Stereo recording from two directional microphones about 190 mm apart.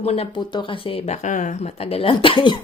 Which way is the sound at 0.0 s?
30° left (ahead or behind).